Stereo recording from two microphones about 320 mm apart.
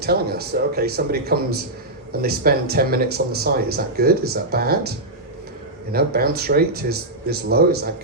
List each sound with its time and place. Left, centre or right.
0.0 s speech: right
5.9 s speech: right